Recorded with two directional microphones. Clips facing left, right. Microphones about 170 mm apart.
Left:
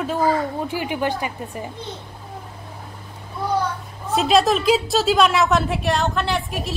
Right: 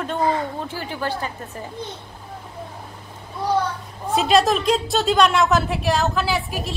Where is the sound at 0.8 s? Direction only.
15° left (ahead or behind).